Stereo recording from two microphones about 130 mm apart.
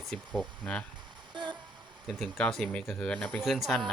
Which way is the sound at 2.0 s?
Centre (ahead or behind).